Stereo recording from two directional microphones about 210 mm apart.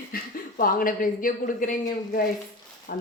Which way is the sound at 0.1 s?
45° left (ahead or behind).